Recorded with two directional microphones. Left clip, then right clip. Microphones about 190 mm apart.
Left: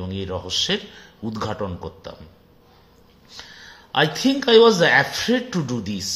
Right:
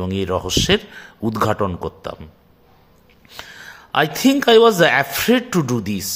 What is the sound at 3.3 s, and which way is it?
A man's voice, 55° right (ahead or behind).